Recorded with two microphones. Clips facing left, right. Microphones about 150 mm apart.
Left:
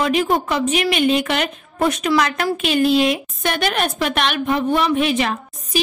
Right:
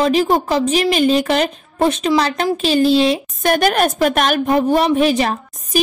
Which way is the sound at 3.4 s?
45° right (ahead or behind).